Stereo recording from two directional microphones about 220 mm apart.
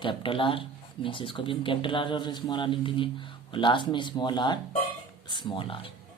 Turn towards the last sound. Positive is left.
turn(degrees=25)  # may be behind; listen again after turning